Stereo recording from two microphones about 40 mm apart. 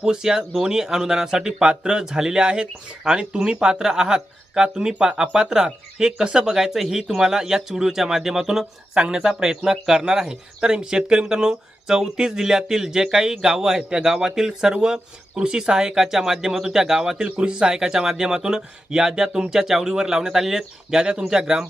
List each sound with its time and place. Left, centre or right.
0.0 s speech: centre
17.2 s speech: right